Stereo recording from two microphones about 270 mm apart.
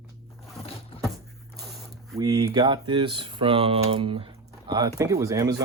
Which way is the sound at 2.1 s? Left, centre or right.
Centre.